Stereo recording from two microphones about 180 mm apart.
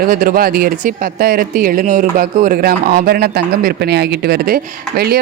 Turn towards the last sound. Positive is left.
turn(degrees=-60)  # may be behind; listen again after turning